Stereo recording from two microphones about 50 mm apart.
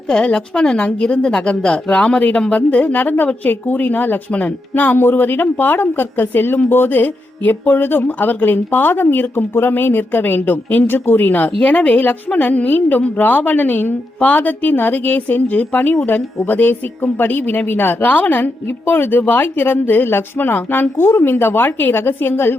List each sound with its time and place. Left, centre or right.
0.1 s a woman's voice: centre
4.7 s a woman's voice: left